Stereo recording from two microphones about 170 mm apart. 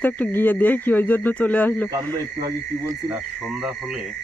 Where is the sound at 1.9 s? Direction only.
20° right (ahead or behind).